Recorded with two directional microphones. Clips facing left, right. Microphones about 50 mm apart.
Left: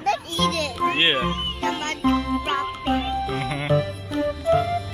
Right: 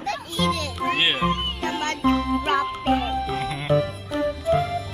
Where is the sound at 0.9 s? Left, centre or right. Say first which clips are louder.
Even; centre.